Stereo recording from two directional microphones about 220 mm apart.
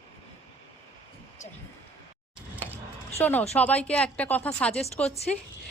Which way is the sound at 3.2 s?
10° left (ahead or behind).